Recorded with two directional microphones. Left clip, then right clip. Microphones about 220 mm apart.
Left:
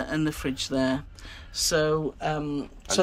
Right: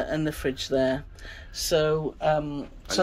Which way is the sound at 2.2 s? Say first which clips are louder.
Right 4 dB; 5° left (ahead or behind).